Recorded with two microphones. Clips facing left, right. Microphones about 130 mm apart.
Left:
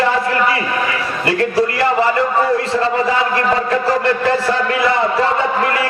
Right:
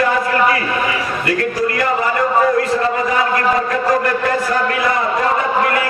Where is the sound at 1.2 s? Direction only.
30° left (ahead or behind).